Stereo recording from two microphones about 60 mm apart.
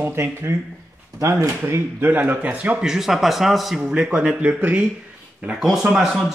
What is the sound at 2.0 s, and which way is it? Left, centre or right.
Speech, right.